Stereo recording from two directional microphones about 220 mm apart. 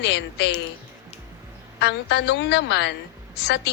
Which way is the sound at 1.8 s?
50° left (ahead or behind).